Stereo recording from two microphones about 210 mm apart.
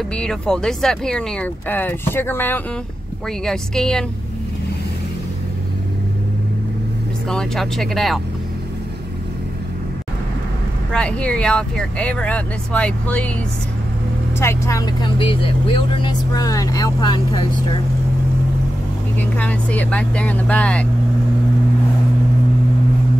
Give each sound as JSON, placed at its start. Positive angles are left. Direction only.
{"t": 0.1, "sound": "speech", "side_deg": 5}
{"t": 7.2, "sound": "speech", "side_deg": 0}
{"t": 10.9, "sound": "speech", "side_deg": 5}
{"t": 14.4, "sound": "speech", "side_deg": 15}
{"t": 19.1, "sound": "speech", "side_deg": 5}